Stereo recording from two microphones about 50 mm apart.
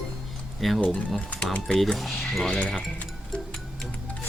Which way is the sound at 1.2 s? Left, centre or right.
Left.